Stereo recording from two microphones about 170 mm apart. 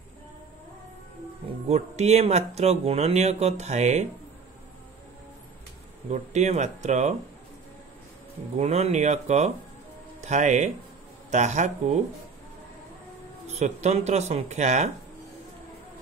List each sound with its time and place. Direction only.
1.7 s speech: 40° right (ahead or behind)
6.0 s speech: 45° right (ahead or behind)
8.5 s speech: 40° right (ahead or behind)
13.5 s speech: 40° right (ahead or behind)